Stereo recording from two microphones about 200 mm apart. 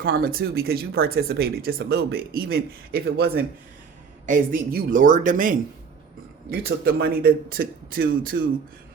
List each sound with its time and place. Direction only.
0.2 s speech: 50° right (ahead or behind)